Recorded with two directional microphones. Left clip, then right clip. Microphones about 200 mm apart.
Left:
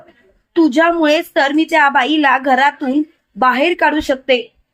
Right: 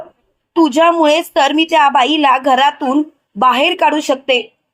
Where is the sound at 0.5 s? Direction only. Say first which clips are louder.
Right 2 dB; 25° right (ahead or behind).